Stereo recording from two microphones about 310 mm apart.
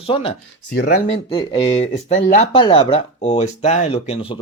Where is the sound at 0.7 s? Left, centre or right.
Left.